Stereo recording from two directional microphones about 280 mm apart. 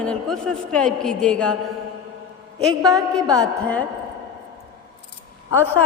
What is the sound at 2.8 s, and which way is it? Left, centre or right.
Speech, centre.